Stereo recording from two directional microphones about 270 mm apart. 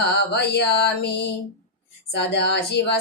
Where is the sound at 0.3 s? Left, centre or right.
Left.